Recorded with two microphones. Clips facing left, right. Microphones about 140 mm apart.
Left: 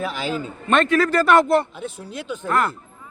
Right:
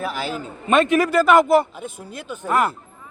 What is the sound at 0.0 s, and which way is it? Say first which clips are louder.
A man's voice: left 1 dB; 5° right (ahead or behind).